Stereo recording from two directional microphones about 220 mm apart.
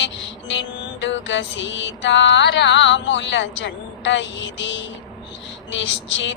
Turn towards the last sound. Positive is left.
turn(degrees=60)  # may be behind; listen again after turning